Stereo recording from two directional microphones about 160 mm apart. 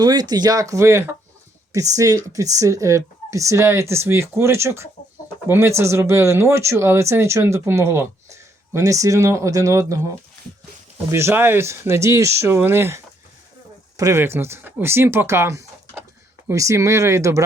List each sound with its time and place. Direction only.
0.0 s speech: 25° right (ahead or behind)
11.1 s speech: 15° right (ahead or behind)